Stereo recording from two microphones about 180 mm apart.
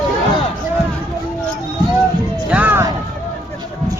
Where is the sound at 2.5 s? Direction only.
10° right (ahead or behind).